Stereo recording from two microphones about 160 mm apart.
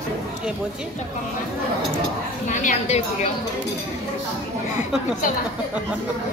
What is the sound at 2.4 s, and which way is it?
Speech, 50° left (ahead or behind).